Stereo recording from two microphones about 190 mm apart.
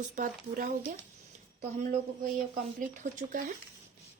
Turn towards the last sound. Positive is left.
turn(degrees=-40)  # may be behind; listen again after turning